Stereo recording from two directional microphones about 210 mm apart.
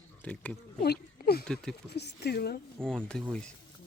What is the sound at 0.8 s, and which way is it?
Speech, 50° left (ahead or behind).